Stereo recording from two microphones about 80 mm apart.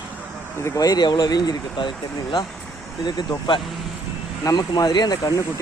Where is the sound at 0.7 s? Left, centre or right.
Left.